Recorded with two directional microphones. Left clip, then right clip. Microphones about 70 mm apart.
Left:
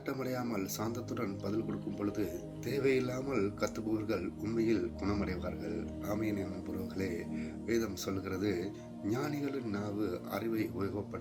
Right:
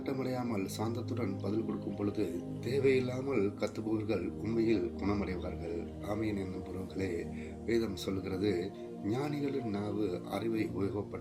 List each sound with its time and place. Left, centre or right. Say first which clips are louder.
0.1 s speech: even; right
7.7 s speech: right 1 dB; right